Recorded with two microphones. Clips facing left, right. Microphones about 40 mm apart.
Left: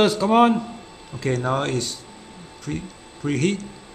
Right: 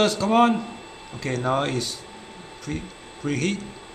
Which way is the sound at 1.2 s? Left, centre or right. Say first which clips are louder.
Left 1 dB; centre.